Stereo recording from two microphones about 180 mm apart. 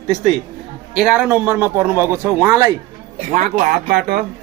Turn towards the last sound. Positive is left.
turn(degrees=-55)  # may be behind; listen again after turning